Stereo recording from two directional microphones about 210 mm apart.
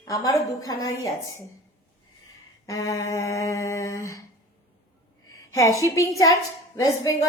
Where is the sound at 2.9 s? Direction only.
15° left (ahead or behind).